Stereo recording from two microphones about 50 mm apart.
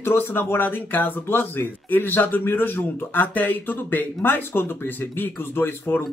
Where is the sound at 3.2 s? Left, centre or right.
Left.